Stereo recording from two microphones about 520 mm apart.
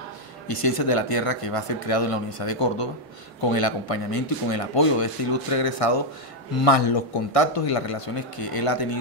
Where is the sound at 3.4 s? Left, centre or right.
Left.